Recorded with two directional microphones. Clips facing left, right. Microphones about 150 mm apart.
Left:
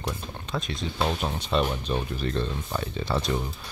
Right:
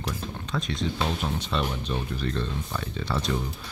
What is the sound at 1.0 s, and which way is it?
Speech, 20° left (ahead or behind).